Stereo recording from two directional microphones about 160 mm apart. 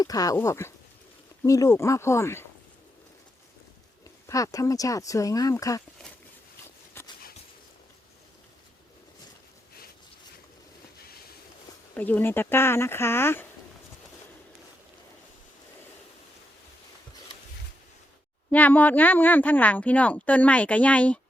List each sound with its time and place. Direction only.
0.0 s a woman's voice: 25° left (ahead or behind)
4.0 s speech: 20° left (ahead or behind)
7.0 s a sound: 15° left (ahead or behind)
11.9 s a woman's voice: 10° left (ahead or behind)
18.5 s a woman's voice: 10° left (ahead or behind)